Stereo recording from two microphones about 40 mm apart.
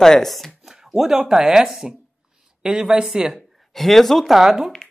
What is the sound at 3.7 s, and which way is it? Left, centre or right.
Speech, centre.